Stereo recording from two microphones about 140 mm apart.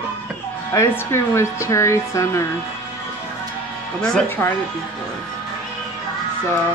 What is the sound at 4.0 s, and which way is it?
Speech, 5° left (ahead or behind).